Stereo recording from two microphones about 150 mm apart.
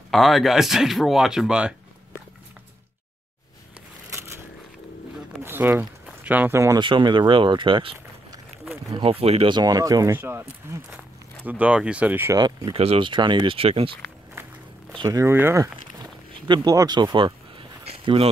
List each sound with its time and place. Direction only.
0.1 s speech: centre (ahead or behind)
5.4 s a sound: 15° right (ahead or behind)
6.8 s speech: 30° right (ahead or behind)
9.6 s speech: 25° right (ahead or behind)
12.4 s speech: 30° right (ahead or behind)
12.7 s speech: 40° right (ahead or behind)
15.0 s speech: 20° right (ahead or behind)
16.4 s a sound: 30° right (ahead or behind)